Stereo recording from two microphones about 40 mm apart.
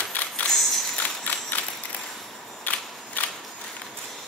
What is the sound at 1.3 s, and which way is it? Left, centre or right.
Mechanisms, left.